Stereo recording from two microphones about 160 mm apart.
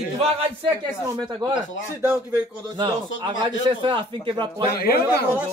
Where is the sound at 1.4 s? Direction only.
25° right (ahead or behind).